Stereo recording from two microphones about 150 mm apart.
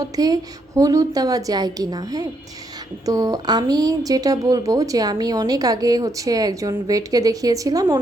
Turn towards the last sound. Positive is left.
turn(degrees=-25)  # may be behind; listen again after turning